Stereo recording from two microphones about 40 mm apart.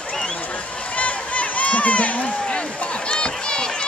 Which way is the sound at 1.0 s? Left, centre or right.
Left.